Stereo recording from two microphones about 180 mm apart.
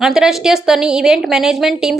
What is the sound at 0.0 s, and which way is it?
Speech, 5° right (ahead or behind).